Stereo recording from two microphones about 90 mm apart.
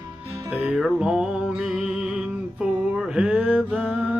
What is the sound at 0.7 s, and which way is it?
Music, 5° right (ahead or behind).